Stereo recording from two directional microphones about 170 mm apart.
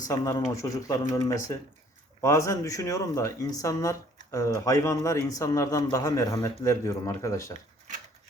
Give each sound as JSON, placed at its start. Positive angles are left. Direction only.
{"t": 0.1, "sound": "speech", "side_deg": 20}